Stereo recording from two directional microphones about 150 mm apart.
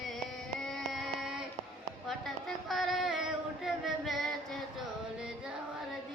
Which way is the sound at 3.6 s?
Centre (ahead or behind).